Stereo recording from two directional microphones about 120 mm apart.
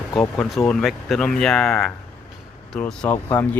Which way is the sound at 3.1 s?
20° left (ahead or behind).